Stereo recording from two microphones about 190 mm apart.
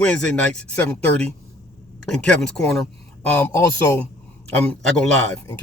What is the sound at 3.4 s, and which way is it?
Music, 15° left (ahead or behind).